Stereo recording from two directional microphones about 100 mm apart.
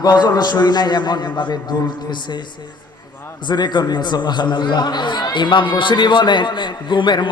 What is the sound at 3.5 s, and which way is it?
A man's voice, 45° left (ahead or behind).